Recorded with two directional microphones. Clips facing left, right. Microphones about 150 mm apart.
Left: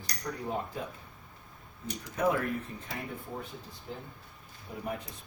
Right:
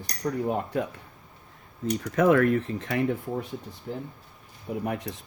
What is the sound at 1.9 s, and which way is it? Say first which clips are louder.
Mechanisms: right 8 dB; 80° right.